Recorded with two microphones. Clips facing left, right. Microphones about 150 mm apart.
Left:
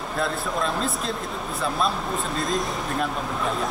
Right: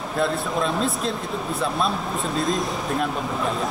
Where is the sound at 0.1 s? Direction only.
Centre (ahead or behind).